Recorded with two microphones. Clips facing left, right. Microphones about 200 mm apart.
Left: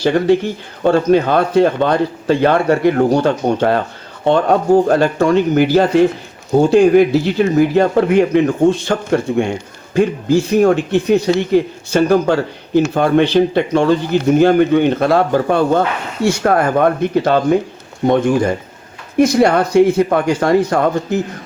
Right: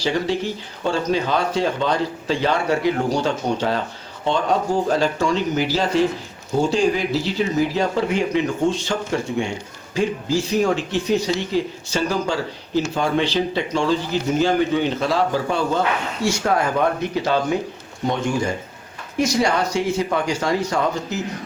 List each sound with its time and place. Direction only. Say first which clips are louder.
0.0 s speech: left 9 dB; 55° left (ahead or behind)